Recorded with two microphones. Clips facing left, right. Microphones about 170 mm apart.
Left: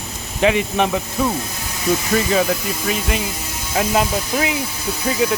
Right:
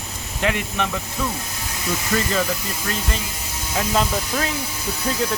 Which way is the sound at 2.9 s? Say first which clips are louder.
Left 5 dB; 15° left (ahead or behind).